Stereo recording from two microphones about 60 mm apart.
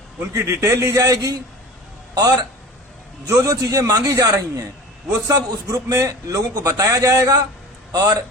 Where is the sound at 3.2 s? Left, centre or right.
Right.